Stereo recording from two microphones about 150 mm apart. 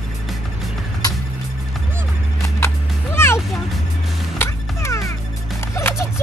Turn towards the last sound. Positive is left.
turn(degrees=20)  # may be behind; listen again after turning